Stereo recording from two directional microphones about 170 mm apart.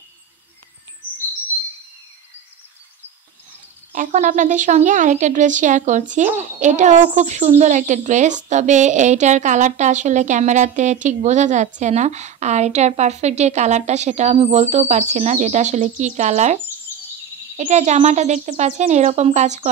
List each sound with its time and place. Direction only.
3.9 s a woman's voice: 45° right (ahead or behind)
17.6 s a woman's voice: 45° right (ahead or behind)